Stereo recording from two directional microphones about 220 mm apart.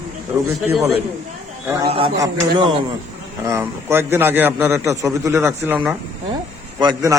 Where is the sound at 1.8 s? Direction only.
25° right (ahead or behind).